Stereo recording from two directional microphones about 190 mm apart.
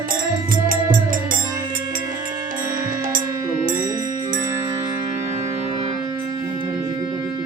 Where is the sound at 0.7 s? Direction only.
45° right (ahead or behind).